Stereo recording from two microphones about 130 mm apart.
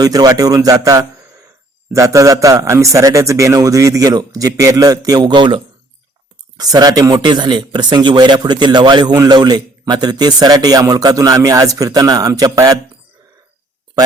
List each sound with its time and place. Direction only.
0.0 s a man's voice: 30° right (ahead or behind)